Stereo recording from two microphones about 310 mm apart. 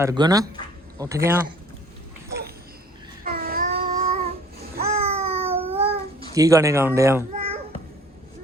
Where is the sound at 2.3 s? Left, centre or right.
Right.